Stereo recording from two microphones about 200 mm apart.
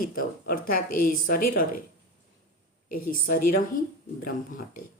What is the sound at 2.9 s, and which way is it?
Speech, 45° left (ahead or behind).